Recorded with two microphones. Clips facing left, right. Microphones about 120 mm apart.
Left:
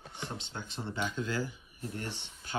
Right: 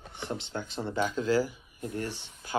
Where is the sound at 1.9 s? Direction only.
25° left (ahead or behind).